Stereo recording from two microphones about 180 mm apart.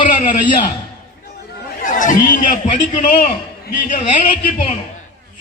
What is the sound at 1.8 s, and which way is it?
Speech, 45° left (ahead or behind).